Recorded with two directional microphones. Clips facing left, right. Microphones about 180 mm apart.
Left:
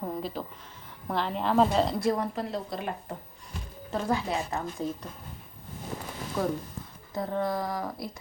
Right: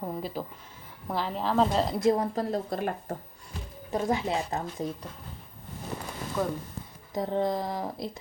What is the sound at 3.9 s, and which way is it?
Speech, 20° right (ahead or behind).